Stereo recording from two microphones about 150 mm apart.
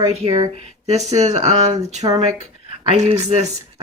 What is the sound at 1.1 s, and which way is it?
Speech, 50° right (ahead or behind).